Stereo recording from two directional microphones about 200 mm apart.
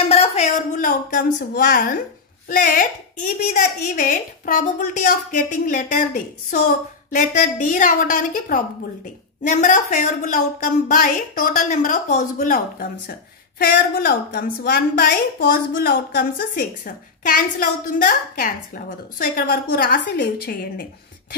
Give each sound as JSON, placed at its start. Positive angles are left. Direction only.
{"t": 0.1, "sound": "a woman's voice", "side_deg": 30}